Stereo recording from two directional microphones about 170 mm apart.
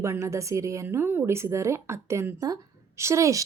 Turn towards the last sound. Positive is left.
turn(degrees=-20)  # may be behind; listen again after turning